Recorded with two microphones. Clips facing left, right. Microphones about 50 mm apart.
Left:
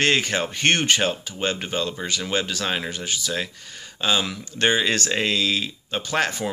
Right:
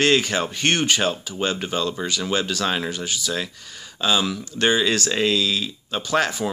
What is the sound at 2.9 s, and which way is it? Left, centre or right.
Speech, left.